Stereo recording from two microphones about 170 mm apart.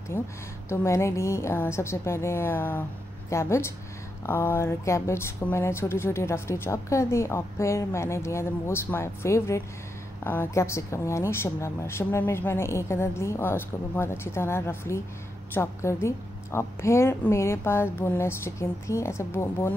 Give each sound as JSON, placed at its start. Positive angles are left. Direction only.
{"t": 0.1, "sound": "speech", "side_deg": 15}